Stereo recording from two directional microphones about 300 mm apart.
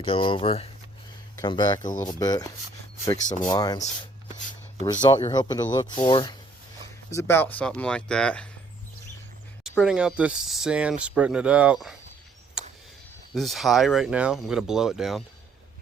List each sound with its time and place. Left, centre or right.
0.0 s speech: centre
9.6 s speech: centre
12.6 s a sound: centre
13.3 s speech: centre